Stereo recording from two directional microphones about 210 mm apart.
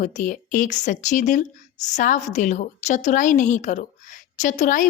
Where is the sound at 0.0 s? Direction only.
40° left (ahead or behind).